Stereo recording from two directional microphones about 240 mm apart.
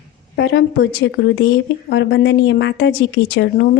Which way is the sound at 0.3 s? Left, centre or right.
Left.